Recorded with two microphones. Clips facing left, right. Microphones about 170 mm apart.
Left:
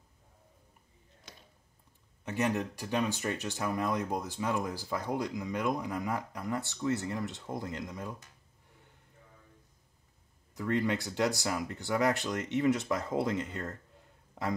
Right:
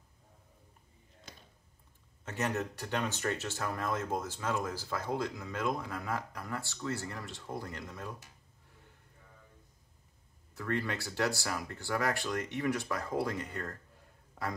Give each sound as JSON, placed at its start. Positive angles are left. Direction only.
{"t": 2.2, "sound": "speech", "side_deg": 15}
{"t": 10.5, "sound": "speech", "side_deg": 15}